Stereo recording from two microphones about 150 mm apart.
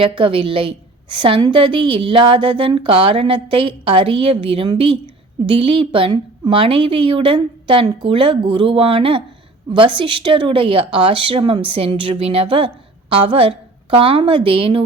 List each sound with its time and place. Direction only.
0.2 s a woman's voice: 35° right (ahead or behind)